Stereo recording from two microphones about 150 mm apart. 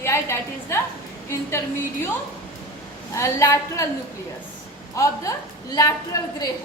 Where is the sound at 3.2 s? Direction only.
20° left (ahead or behind).